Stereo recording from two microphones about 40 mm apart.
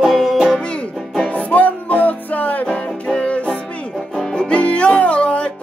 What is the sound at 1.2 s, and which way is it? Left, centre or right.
Music, left.